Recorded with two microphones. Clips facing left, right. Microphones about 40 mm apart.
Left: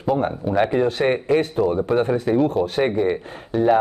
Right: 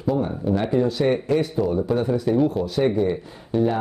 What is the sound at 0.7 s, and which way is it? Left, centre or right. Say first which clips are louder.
Speech: left 1 dB; left.